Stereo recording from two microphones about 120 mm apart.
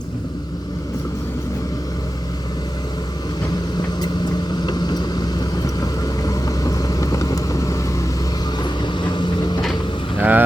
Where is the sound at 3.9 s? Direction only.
35° left (ahead or behind).